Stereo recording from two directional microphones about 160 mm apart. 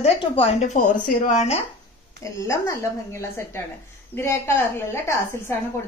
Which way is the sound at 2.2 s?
20° left (ahead or behind).